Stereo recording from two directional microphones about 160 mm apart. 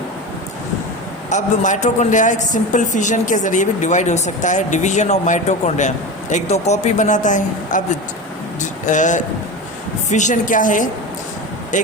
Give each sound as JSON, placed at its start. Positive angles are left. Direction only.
{"t": 1.3, "sound": "speech", "side_deg": 50}
{"t": 8.6, "sound": "a sound", "side_deg": 50}
{"t": 10.1, "sound": "a woman's voice", "side_deg": 50}